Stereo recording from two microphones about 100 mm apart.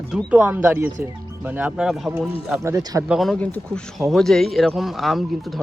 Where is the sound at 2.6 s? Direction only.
35° right (ahead or behind).